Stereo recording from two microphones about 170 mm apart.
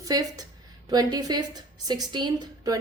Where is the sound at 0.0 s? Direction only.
20° right (ahead or behind).